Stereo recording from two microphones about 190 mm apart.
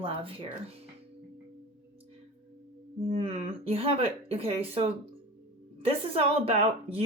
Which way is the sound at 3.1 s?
30° right (ahead or behind).